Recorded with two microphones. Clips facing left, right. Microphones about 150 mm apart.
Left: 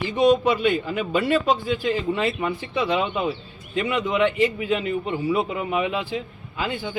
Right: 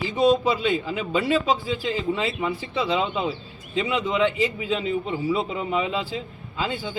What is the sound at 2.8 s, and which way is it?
A man's voice, centre (ahead or behind).